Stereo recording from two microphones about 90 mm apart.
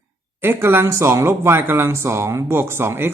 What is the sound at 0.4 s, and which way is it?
Speech, 25° right (ahead or behind).